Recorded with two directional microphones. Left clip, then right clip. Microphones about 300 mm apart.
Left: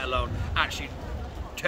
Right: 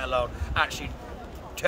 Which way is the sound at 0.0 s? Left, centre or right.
Centre.